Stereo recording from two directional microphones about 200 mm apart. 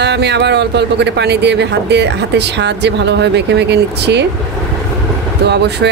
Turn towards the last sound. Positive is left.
turn(degrees=-55)  # may be behind; listen again after turning